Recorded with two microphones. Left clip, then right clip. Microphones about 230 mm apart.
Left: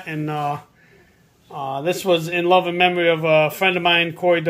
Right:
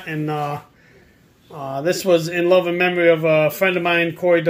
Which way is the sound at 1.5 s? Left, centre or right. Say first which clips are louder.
Right 1 dB; centre.